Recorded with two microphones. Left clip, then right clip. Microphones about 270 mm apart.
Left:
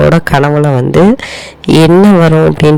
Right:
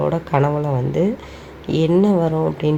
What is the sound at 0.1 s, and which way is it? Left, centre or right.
A man's voice, left.